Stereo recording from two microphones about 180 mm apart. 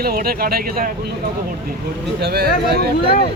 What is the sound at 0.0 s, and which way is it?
Speech, 55° right (ahead or behind).